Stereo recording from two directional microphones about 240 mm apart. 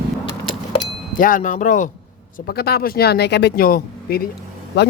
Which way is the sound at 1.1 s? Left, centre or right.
Left.